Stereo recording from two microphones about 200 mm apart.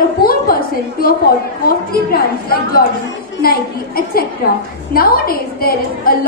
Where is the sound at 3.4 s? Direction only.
50° left (ahead or behind).